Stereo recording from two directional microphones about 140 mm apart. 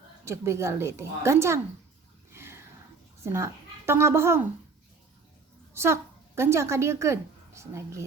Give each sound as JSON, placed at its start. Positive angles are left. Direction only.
{"t": 0.3, "sound": "speech", "side_deg": -20}
{"t": 2.3, "sound": "a sound", "side_deg": -15}
{"t": 3.2, "sound": "speech", "side_deg": -20}
{"t": 5.7, "sound": "a woman's voice", "side_deg": -20}